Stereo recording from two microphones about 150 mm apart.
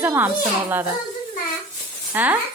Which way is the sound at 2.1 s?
15° right (ahead or behind).